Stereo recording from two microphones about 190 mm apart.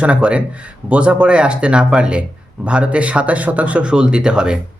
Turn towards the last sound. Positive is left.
turn(degrees=-5)  # may be behind; listen again after turning